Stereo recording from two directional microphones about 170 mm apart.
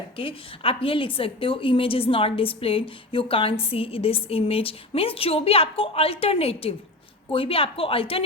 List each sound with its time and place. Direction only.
0.2 s a woman's voice: 30° left (ahead or behind)